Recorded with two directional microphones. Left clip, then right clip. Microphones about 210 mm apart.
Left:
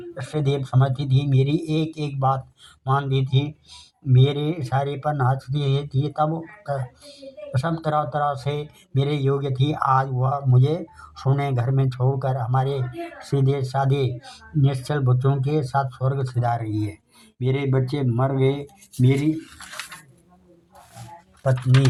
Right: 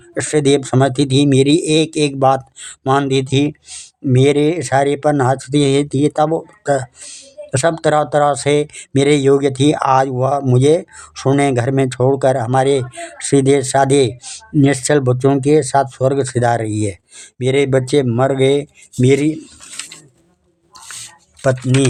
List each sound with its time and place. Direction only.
0.1 s speech: 35° right (ahead or behind)